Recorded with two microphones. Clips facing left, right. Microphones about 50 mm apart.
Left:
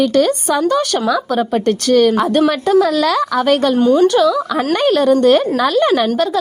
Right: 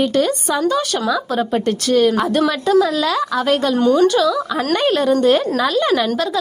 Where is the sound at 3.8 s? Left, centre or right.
Centre.